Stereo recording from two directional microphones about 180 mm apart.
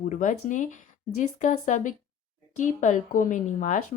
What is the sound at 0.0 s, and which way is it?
Speech, 45° left (ahead or behind).